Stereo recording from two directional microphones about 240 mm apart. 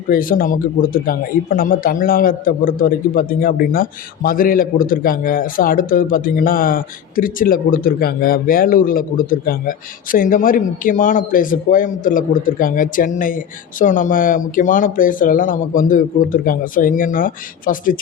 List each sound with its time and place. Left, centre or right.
0.1 s a man's voice: left